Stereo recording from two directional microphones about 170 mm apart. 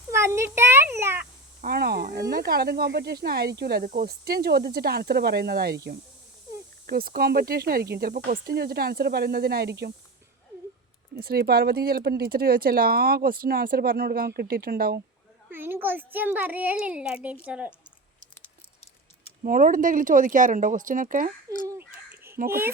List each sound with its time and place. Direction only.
0.1 s a sound: 15° right (ahead or behind)
1.6 s speech: 65° right (ahead or behind)
11.2 s speech: 65° right (ahead or behind)
15.4 s a child's voice: 10° right (ahead or behind)
19.4 s speech: 55° right (ahead or behind)
21.7 s a sound: 15° right (ahead or behind)
22.4 s a child's voice: 15° right (ahead or behind)